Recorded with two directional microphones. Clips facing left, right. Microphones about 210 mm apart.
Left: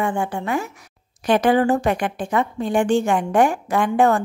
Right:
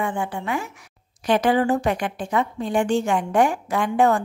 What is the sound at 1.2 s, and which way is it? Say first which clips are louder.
A woman's voice: left 2 dB; 55° left (ahead or behind).